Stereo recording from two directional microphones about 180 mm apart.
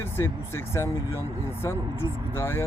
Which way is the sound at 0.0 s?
15° left (ahead or behind).